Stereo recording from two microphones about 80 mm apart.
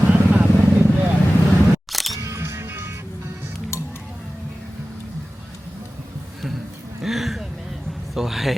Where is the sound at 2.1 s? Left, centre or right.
Right.